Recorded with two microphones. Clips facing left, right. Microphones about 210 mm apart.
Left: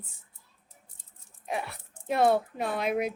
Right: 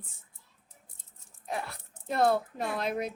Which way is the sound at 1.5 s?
5° left (ahead or behind).